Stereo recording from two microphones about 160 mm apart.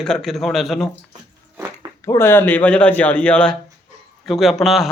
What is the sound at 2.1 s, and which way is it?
A man's voice, 15° left (ahead or behind).